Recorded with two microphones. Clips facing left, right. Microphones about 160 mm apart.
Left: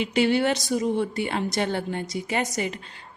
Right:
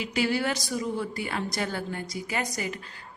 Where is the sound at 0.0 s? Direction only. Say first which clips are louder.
Left 5 dB; 25° left (ahead or behind).